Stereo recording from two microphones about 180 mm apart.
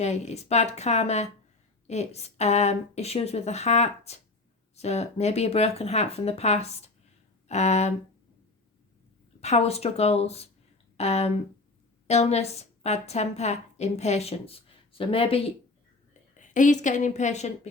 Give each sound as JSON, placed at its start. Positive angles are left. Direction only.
{"t": 0.0, "sound": "a woman's voice", "side_deg": 40}
{"t": 9.4, "sound": "a woman's voice", "side_deg": 35}
{"t": 16.4, "sound": "a woman's voice", "side_deg": 45}